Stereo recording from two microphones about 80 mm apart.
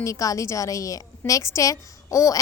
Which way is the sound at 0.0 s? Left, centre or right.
Left.